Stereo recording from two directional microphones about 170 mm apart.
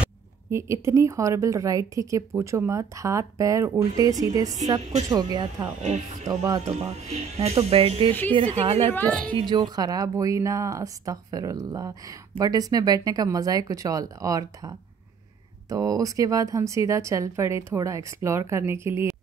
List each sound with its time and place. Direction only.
0.0 s speech: 15° right (ahead or behind)
5.7 s speech: 45° right (ahead or behind)
6.2 s speech: 20° right (ahead or behind)
6.6 s speech: 40° right (ahead or behind)
8.1 s a woman's voice: 10° left (ahead or behind)
8.4 s speech: 35° right (ahead or behind)
8.8 s a woman's voice: 10° left (ahead or behind)
9.3 s speech: 25° right (ahead or behind)